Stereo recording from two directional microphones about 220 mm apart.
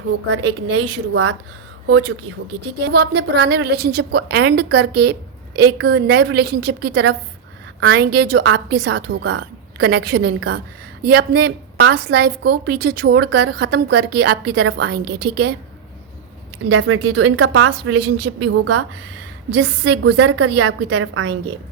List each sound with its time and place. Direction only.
0.9 s a woman's voice: 55° right (ahead or behind)
16.7 s speech: 65° right (ahead or behind)
18.0 s speech: 55° right (ahead or behind); by 18.9 s 70° right (ahead or behind)
19.5 s a woman's voice: 50° right (ahead or behind)